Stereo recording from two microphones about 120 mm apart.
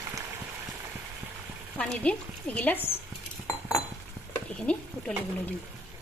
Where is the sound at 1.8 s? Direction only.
10° left (ahead or behind).